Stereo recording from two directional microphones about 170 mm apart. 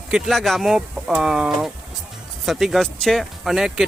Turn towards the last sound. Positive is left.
turn(degrees=0)  # may be behind; listen again after turning